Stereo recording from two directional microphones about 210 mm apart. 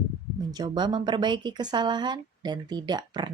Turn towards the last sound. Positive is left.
turn(degrees=-20)  # may be behind; listen again after turning